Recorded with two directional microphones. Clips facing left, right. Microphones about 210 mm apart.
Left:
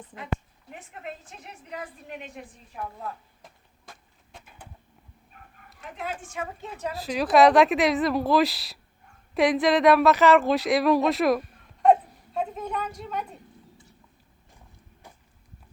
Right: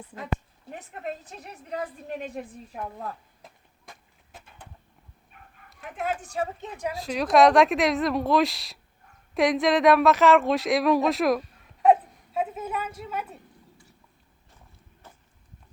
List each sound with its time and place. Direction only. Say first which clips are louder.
0.7 s a woman's voice: right 4 dB; 40° right (ahead or behind)
3.8 s vehicle: even; 5° right (ahead or behind)
6.0 s a woman's voice: right 5 dB; 45° right (ahead or behind)
6.6 s speech: right 1 dB; 15° right (ahead or behind)
6.9 s speech: even; centre (ahead or behind)
15.0 s a sound: left 1 dB; 10° left (ahead or behind)